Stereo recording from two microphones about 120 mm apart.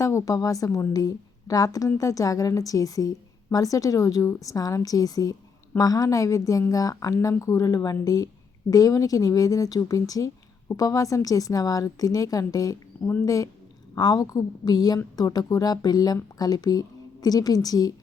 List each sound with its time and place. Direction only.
0.0 s a woman's voice: 25° left (ahead or behind)